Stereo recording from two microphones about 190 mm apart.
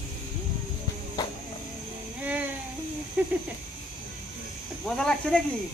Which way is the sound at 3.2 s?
10° right (ahead or behind).